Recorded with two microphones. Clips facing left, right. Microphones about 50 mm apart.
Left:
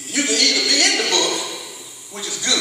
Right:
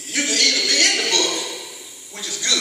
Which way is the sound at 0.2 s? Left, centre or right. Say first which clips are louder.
Left 2 dB; left.